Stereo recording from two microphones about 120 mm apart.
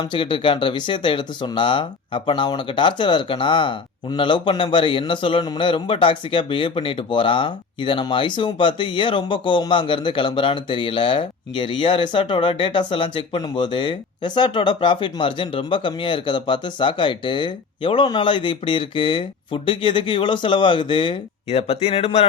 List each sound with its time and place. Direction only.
0.0 s speech: 45° left (ahead or behind)